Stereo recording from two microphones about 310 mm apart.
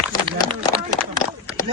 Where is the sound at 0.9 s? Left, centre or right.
Centre.